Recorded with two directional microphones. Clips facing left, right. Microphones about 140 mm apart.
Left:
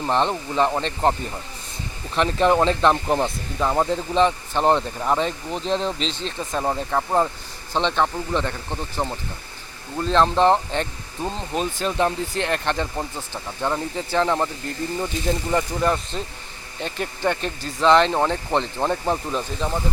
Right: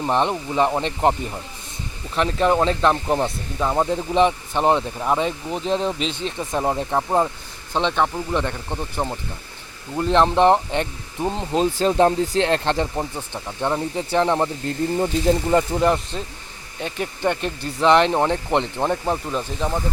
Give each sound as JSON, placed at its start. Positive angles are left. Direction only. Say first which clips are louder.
{"t": 0.0, "sound": "speech", "louder": "right 1 dB", "side_deg": -10}
{"t": 2.1, "sound": "speech", "louder": "even", "side_deg": 0}
{"t": 11.8, "sound": "speech", "louder": "right 6 dB", "side_deg": -35}
{"t": 16.8, "sound": "speech", "louder": "right 1 dB", "side_deg": -10}
{"t": 18.9, "sound": "speech", "louder": "even", "side_deg": -5}